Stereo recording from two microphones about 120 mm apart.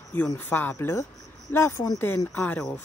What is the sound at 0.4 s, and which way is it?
Speech, 15° left (ahead or behind).